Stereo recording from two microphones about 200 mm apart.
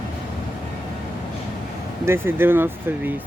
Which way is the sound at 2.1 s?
10° right (ahead or behind).